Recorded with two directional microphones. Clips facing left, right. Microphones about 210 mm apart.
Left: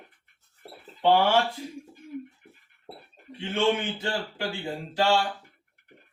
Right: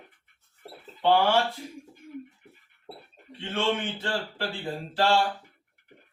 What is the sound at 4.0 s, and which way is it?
Speech, 15° left (ahead or behind).